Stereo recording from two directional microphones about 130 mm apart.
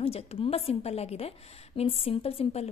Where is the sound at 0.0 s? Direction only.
50° left (ahead or behind).